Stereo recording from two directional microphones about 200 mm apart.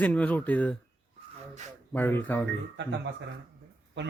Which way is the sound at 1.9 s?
10° left (ahead or behind).